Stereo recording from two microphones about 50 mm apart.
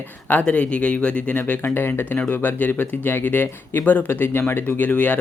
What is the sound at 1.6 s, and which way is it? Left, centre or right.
Speech, left.